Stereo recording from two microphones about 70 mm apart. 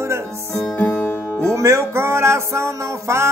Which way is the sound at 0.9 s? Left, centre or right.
Left.